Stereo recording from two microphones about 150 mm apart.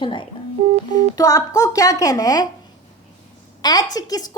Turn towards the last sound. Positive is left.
turn(degrees=25)  # may be behind; listen again after turning